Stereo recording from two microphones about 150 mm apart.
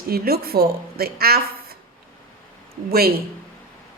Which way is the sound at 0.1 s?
90° right.